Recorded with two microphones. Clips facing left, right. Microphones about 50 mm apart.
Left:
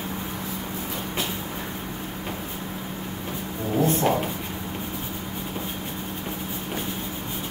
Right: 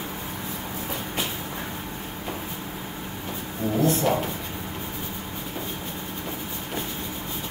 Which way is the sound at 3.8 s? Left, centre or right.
Left.